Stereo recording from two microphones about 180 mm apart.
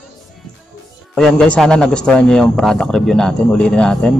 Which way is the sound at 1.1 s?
5° left (ahead or behind).